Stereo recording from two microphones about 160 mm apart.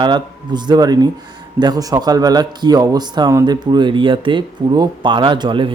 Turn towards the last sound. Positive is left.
turn(degrees=-30)  # may be behind; listen again after turning